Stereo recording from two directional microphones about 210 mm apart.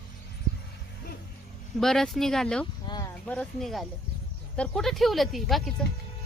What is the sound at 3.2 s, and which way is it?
Speech, 5° left (ahead or behind).